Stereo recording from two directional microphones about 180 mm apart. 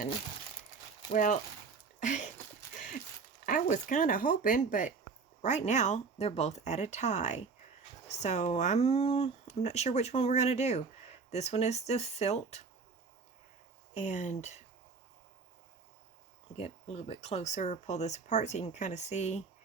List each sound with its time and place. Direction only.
1.1 s speech: 45° left (ahead or behind)
2.0 s a sound: 45° left (ahead or behind)
3.4 s speech: 45° left (ahead or behind)
13.9 s speech: 40° left (ahead or behind)
16.6 s speech: 35° left (ahead or behind)